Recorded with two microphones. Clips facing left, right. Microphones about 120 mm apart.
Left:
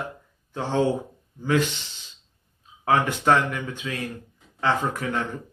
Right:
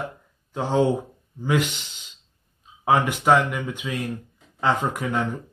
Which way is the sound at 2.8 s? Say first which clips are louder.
Right 1 dB; 10° right (ahead or behind).